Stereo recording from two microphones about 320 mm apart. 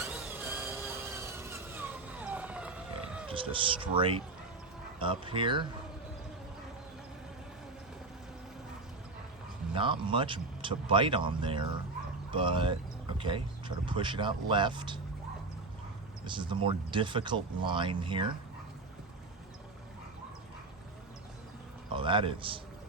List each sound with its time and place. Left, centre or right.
0.0 s vehicle: centre
3.2 s speech: centre
9.7 s speech: centre
16.2 s speech: centre
21.8 s a man's voice: centre